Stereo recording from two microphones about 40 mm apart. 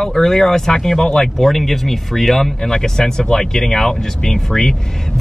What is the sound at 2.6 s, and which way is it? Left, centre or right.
Speech, centre.